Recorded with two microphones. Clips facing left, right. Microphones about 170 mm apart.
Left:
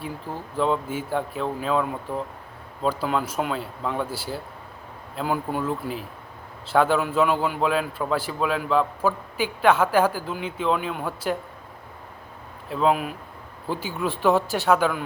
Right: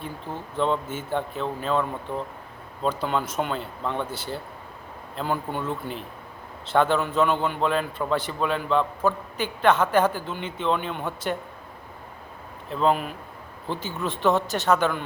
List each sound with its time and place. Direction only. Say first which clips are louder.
0.5 s a man's voice: left 1 dB; 5° left (ahead or behind)
12.6 s a man's voice: left 1 dB; 5° left (ahead or behind)